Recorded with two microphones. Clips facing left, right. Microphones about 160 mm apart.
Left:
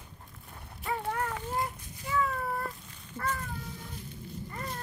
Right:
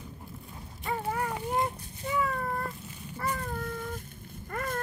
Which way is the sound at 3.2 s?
10° right (ahead or behind).